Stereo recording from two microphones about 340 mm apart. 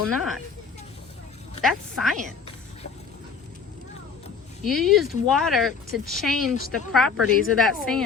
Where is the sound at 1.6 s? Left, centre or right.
Centre.